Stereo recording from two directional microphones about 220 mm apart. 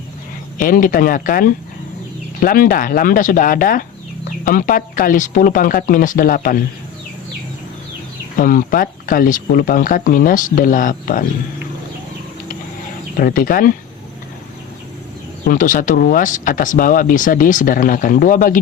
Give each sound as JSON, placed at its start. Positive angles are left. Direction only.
{"t": 0.6, "sound": "speech", "side_deg": 40}
{"t": 8.4, "sound": "speech", "side_deg": 40}
{"t": 13.1, "sound": "speech", "side_deg": 40}
{"t": 15.4, "sound": "speech", "side_deg": 35}